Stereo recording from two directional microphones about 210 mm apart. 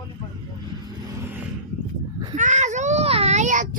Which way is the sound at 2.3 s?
35° right (ahead or behind).